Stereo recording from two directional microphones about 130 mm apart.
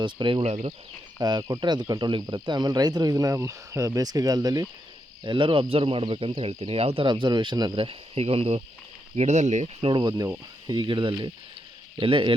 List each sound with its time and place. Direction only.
0.0 s speech: 35° right (ahead or behind)
5.2 s speech: 40° right (ahead or behind); by 9.6 s 65° right (ahead or behind)
9.8 s speech: 35° right (ahead or behind)